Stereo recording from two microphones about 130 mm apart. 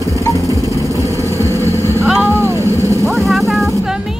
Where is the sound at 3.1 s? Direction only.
Centre (ahead or behind).